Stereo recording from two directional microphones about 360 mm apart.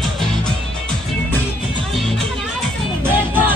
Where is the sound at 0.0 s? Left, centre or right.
Centre.